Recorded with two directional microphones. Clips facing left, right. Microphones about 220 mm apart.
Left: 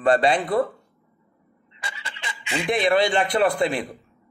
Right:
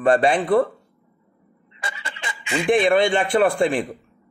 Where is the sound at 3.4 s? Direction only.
50° right (ahead or behind).